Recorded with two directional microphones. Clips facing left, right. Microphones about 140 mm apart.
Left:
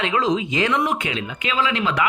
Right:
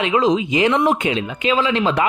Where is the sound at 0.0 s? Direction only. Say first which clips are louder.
Right 4 dB; 15° right (ahead or behind).